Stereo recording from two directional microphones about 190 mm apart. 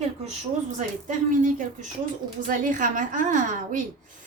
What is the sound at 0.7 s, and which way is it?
A woman's voice, 40° right (ahead or behind).